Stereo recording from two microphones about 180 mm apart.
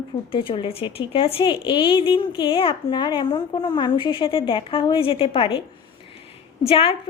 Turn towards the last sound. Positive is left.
turn(degrees=30)  # may be behind; listen again after turning